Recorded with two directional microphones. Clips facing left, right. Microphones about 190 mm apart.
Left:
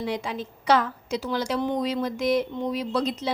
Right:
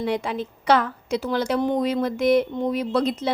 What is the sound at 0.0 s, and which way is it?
A woman's voice, 60° right (ahead or behind).